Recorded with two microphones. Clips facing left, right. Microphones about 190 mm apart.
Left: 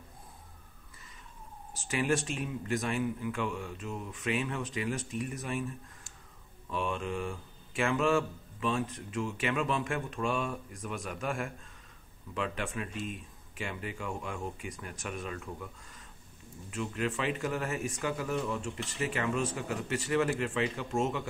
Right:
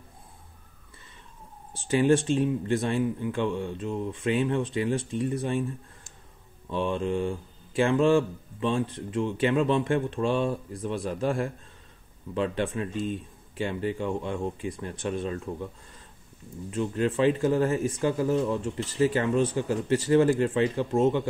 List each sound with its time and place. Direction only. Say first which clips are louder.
1.7 s speech: right 9 dB; 30° right (ahead or behind)
16.7 s speech: right 7 dB; 30° right (ahead or behind)